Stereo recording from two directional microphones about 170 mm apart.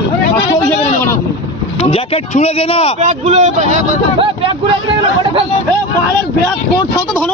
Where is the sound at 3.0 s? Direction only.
45° right (ahead or behind).